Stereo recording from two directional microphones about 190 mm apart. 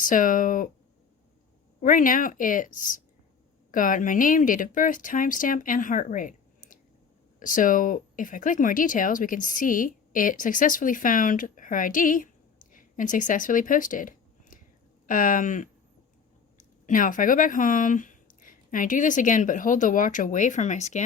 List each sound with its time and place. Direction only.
0.0 s speech: 45° left (ahead or behind)
1.8 s speech: 45° left (ahead or behind)